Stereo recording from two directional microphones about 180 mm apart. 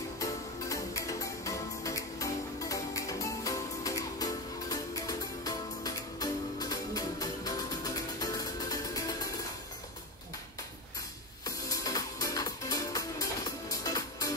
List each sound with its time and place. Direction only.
0.2 s music: 15° left (ahead or behind)
11.4 s music: 20° left (ahead or behind)